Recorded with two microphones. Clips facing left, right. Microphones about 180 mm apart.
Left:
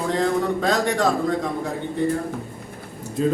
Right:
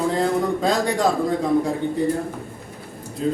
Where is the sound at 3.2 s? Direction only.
65° left (ahead or behind).